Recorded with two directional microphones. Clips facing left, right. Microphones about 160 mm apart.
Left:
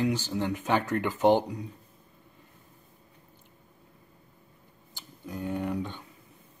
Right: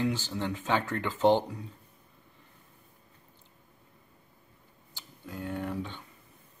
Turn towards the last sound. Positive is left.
turn(degrees=15)  # may be behind; listen again after turning